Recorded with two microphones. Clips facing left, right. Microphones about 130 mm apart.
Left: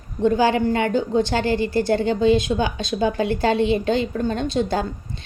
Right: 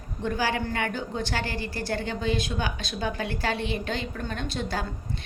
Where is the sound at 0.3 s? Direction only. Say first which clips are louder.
Left 10 dB; 20° left (ahead or behind).